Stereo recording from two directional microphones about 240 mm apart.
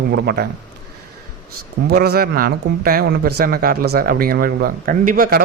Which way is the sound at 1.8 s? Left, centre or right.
Right.